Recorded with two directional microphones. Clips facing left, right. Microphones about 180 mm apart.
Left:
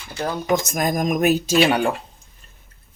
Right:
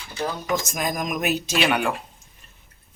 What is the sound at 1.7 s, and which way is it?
Speech, 30° left (ahead or behind).